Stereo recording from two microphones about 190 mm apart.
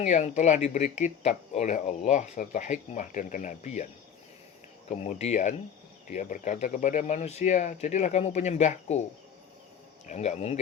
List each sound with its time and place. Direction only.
0.0 s speech: 40° left (ahead or behind)
4.9 s speech: 35° left (ahead or behind)
10.1 s speech: 35° left (ahead or behind)